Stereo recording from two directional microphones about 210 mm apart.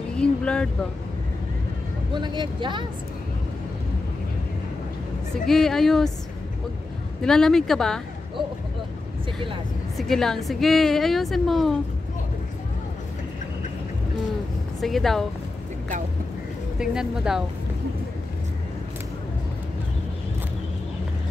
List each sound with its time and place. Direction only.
0.2 s vehicle: 5° left (ahead or behind)
2.1 s speech: 20° right (ahead or behind)
5.5 s a woman's voice: centre (ahead or behind)
7.2 s a woman's voice: 5° left (ahead or behind)
9.9 s a woman's voice: centre (ahead or behind)
14.8 s a woman's voice: centre (ahead or behind)
16.7 s a woman's voice: 5° right (ahead or behind)